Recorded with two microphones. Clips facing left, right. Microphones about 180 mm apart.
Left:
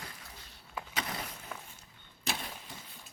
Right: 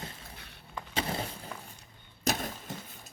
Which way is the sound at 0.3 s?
65° right (ahead or behind).